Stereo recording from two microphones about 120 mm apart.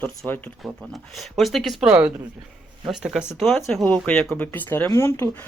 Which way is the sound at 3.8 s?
10° left (ahead or behind).